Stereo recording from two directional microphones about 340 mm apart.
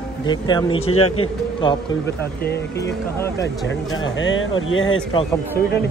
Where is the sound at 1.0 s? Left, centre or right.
Left.